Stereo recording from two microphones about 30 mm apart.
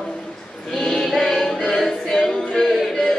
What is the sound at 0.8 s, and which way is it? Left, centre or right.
Choir, centre.